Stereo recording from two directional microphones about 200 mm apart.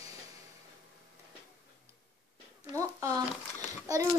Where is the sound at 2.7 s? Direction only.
15° right (ahead or behind).